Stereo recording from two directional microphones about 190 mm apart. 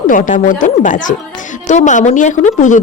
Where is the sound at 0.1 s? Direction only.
45° left (ahead or behind).